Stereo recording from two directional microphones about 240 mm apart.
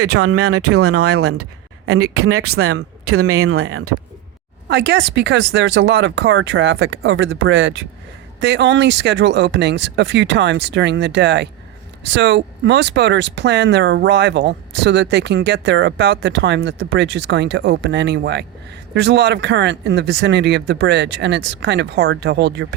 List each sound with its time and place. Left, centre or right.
0.0 s speech: right
4.7 s speech: right